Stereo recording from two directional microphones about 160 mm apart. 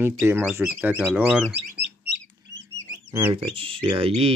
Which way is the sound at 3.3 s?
35° right (ahead or behind).